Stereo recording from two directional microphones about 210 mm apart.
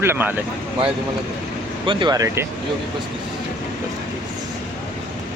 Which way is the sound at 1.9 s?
20° right (ahead or behind).